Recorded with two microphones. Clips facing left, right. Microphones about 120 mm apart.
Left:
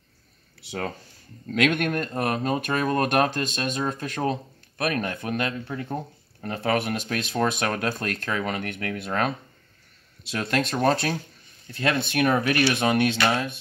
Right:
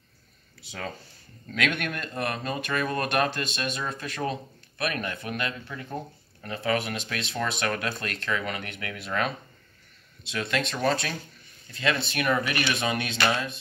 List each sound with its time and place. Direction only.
0.7 s speech: 60° left (ahead or behind)
1.7 s speech: 45° left (ahead or behind)
6.4 s speech: 55° left (ahead or behind)
10.3 s speech: 45° left (ahead or behind)